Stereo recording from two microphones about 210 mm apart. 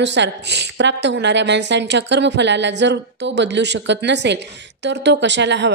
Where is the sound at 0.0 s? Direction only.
55° right (ahead or behind).